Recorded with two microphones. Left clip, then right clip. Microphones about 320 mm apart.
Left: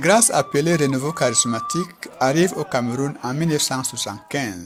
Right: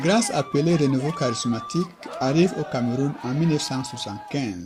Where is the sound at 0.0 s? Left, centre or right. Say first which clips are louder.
Left 6 dB; left.